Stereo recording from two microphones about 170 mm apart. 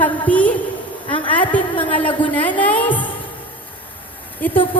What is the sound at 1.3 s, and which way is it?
A woman's voice, 10° left (ahead or behind).